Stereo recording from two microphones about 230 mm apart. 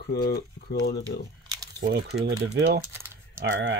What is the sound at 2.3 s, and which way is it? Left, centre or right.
Speech, right.